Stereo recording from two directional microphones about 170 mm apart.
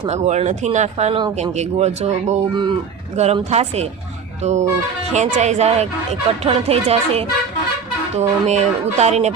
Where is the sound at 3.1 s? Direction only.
40° right (ahead or behind).